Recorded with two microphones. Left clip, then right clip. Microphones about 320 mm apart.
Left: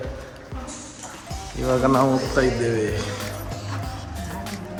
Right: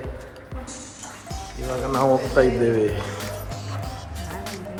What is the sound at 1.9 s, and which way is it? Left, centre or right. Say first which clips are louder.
Speech: right 1 dB; centre.